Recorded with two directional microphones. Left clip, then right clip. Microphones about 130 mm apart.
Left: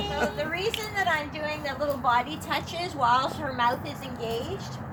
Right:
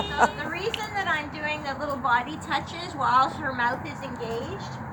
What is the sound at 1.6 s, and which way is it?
A woman's voice, 15° left (ahead or behind).